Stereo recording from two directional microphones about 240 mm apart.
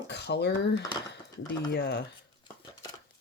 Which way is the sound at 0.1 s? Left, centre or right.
Left.